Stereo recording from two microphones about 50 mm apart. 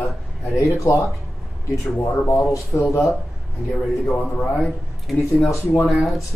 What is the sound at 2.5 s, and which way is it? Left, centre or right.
Speech, left.